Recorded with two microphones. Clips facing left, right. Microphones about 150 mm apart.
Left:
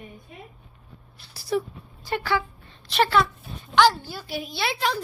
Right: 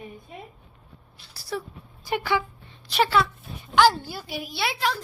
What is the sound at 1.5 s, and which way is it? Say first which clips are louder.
Speech: left 6 dB; 20° left (ahead or behind).